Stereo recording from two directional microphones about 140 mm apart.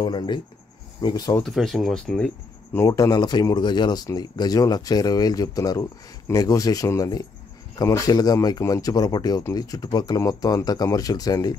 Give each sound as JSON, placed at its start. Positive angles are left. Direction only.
{"t": 0.0, "sound": "speech", "side_deg": 30}
{"t": 1.4, "sound": "speech", "side_deg": 0}
{"t": 2.7, "sound": "speech", "side_deg": 25}